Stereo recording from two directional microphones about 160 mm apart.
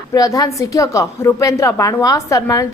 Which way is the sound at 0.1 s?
20° left (ahead or behind).